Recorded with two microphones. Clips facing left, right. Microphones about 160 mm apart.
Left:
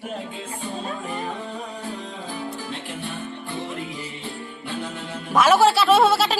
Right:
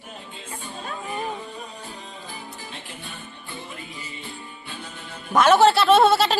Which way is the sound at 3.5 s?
70° left (ahead or behind).